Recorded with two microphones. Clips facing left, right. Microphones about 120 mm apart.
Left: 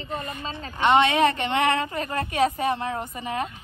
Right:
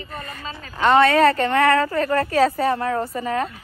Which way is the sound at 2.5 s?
45° right (ahead or behind).